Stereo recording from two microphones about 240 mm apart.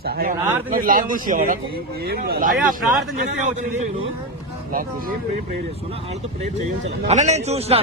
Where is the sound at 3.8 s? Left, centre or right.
Right.